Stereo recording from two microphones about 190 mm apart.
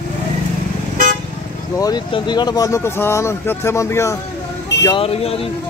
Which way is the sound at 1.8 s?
20° left (ahead or behind).